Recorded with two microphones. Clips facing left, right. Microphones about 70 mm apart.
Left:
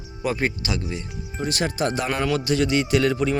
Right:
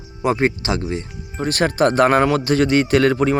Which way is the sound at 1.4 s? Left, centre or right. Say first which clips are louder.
Right 7 dB; right.